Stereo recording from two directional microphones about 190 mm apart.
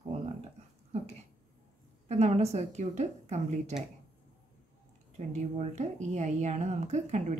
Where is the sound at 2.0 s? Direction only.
35° right (ahead or behind).